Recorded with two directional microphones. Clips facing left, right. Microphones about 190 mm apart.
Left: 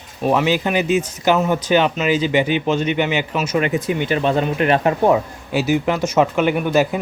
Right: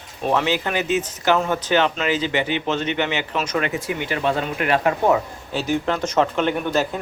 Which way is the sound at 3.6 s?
20° left (ahead or behind).